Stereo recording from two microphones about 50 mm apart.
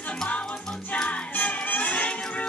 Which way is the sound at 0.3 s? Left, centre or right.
Left.